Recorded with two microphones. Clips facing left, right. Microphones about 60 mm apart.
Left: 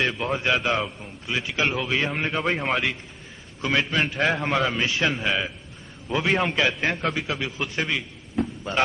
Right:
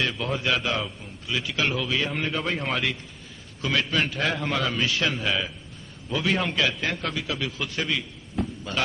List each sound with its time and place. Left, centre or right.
0.2 s a man's voice: left